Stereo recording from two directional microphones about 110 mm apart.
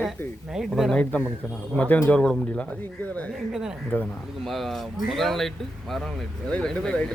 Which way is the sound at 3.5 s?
5° right (ahead or behind).